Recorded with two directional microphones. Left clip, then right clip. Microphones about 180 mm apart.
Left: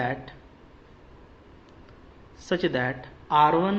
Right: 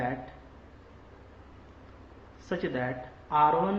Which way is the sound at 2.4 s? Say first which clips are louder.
Left 6 dB; 50° left (ahead or behind).